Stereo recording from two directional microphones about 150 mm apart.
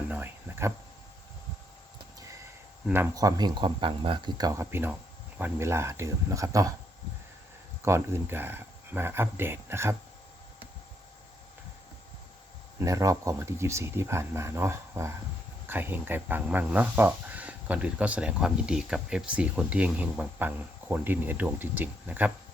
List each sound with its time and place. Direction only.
0.1 s a sound: 15° right (ahead or behind)
2.8 s speech: 15° right (ahead or behind)
7.8 s speech: 20° right (ahead or behind)
12.8 s speech: 20° right (ahead or behind)